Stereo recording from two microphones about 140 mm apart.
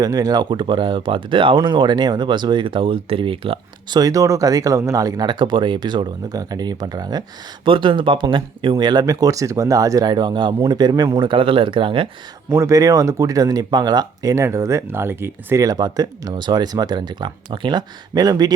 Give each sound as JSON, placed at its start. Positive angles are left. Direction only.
{"t": 0.0, "sound": "speech", "side_deg": -25}
{"t": 12.5, "sound": "speech", "side_deg": -25}